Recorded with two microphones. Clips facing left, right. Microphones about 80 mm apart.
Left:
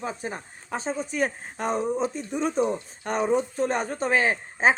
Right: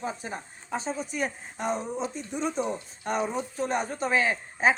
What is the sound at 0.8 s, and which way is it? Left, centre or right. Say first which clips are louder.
A woman's voice: left 4 dB; left.